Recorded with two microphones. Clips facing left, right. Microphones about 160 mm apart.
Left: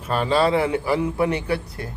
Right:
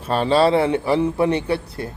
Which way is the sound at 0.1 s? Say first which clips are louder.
Right 3 dB; 30° right (ahead or behind).